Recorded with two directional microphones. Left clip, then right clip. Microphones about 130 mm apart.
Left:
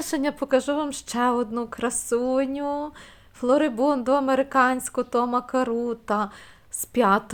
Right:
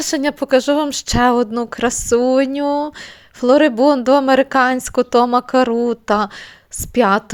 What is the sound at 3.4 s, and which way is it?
A woman's voice, 40° right (ahead or behind).